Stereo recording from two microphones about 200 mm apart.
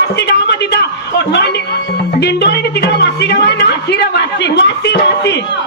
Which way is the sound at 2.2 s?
55° left (ahead or behind).